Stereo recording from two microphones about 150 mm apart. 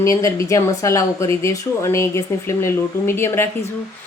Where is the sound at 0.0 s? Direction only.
20° left (ahead or behind).